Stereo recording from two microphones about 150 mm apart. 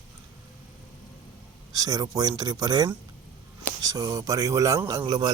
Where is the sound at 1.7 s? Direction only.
25° right (ahead or behind).